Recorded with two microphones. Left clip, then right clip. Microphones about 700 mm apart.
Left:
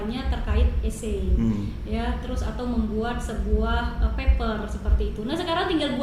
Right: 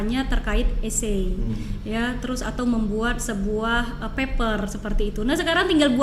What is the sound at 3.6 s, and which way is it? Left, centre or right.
A woman's voice, right.